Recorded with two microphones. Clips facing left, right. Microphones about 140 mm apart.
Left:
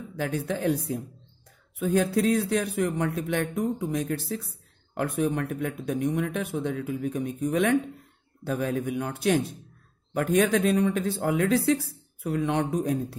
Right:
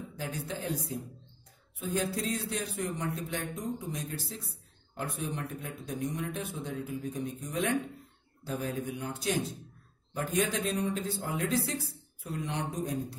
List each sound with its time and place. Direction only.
0.2 s speech: 60° left (ahead or behind)